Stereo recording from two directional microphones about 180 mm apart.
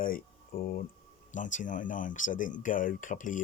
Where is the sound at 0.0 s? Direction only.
50° left (ahead or behind).